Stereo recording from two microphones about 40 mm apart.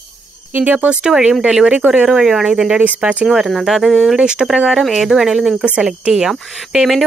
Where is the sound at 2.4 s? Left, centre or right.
Centre.